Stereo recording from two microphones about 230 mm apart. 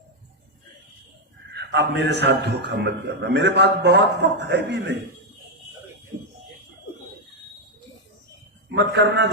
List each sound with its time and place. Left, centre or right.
1.5 s a man's voice: right
6.1 s music: right
8.7 s a man's voice: right